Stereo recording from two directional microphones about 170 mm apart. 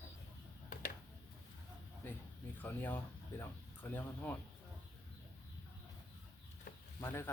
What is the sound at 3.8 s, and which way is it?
Speech, 10° left (ahead or behind).